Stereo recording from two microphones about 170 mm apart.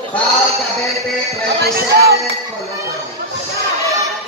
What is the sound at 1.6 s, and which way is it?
Speech, 65° right (ahead or behind).